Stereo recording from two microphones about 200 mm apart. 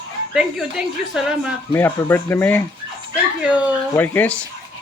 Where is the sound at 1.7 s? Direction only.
10° left (ahead or behind).